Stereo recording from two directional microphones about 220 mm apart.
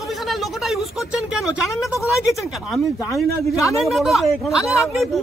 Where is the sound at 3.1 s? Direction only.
15° left (ahead or behind).